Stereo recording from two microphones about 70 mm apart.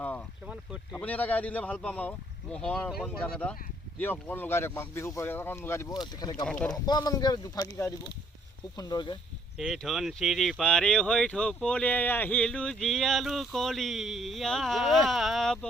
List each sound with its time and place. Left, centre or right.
0.4 s speech: centre
0.9 s speech: left
3.9 s speech: left
5.2 s speech: left
5.9 s speech: left
6.7 s speech: left
7.6 s speech: left
8.7 s speech: left
9.7 s speech: centre; by 12.4 s left
12.4 s speech: centre